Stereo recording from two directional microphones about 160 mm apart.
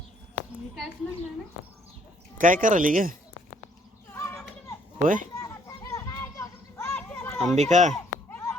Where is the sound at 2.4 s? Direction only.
55° right (ahead or behind).